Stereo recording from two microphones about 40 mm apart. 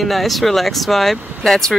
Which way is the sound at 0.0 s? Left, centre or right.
Centre.